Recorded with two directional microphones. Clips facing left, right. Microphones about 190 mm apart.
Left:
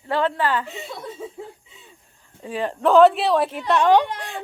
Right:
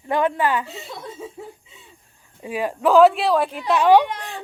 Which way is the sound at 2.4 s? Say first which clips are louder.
Right 1 dB; 10° right (ahead or behind).